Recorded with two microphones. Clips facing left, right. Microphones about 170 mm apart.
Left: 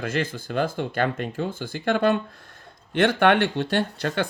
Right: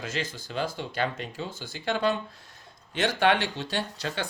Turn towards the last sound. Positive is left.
turn(degrees=55)  # may be behind; listen again after turning